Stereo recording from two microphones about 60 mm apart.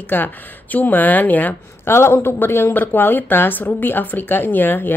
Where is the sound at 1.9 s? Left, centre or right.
Left.